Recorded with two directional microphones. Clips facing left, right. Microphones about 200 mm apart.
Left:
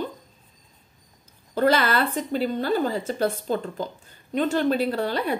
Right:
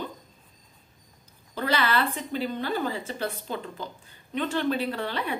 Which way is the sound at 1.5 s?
45° left (ahead or behind).